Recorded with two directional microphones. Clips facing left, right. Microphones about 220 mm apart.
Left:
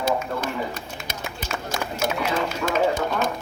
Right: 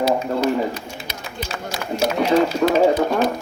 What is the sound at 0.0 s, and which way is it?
Bird, 50° left (ahead or behind).